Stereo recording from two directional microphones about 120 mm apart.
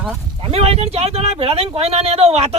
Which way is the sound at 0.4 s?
55° right (ahead or behind).